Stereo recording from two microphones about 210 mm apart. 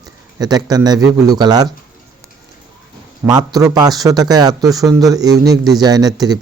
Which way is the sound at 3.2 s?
20° right (ahead or behind).